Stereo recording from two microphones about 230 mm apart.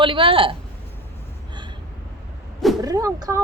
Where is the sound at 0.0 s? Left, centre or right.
Right.